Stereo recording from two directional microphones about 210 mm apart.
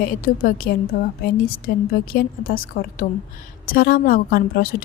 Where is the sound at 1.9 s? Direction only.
45° left (ahead or behind).